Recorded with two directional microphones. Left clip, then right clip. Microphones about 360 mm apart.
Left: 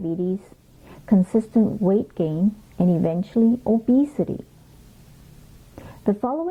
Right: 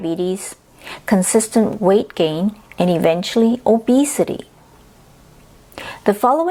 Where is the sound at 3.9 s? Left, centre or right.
Centre.